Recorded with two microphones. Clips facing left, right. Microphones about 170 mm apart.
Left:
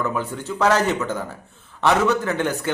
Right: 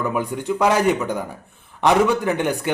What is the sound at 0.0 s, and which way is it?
A man's voice, 15° right (ahead or behind).